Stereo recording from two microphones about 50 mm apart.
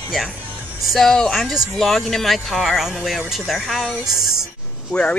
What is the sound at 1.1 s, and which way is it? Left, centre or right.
Speech, centre.